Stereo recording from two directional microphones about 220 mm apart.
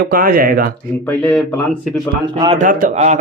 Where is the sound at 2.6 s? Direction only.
40° right (ahead or behind).